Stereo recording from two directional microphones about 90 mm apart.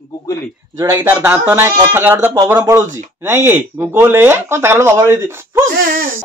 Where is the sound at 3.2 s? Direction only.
25° right (ahead or behind).